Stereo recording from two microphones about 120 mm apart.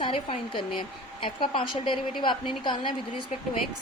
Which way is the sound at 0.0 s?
50° left (ahead or behind).